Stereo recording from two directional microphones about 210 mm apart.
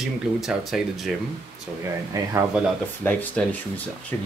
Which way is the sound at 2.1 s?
15° right (ahead or behind).